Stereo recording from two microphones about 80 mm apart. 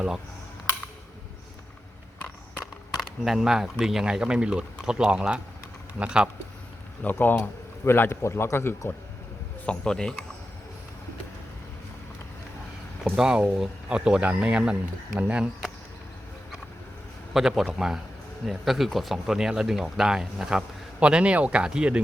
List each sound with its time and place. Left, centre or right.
2.6 s speech: centre
7.0 s a man's voice: left
9.6 s speech: centre
13.1 s speech: centre
17.3 s a man's voice: centre